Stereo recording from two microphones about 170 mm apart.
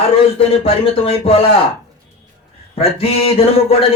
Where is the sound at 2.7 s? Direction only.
35° left (ahead or behind).